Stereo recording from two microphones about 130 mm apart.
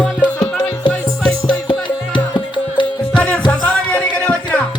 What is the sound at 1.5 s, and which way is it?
Music, 40° left (ahead or behind).